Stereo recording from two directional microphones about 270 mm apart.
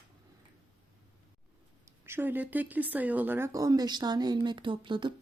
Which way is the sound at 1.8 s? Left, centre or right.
Centre.